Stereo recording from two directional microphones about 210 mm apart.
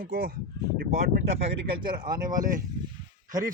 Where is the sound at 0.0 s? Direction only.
50° right (ahead or behind).